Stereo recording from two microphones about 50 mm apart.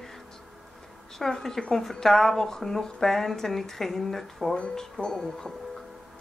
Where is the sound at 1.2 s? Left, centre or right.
Centre.